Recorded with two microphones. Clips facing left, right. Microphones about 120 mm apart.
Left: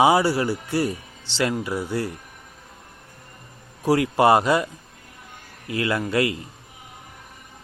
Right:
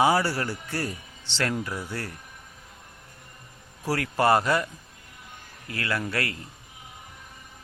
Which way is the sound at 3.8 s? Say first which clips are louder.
Left 6 dB; 15° left (ahead or behind).